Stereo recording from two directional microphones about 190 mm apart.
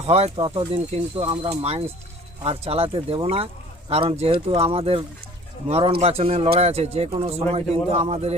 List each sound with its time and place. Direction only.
0.0 s speech: 30° right (ahead or behind)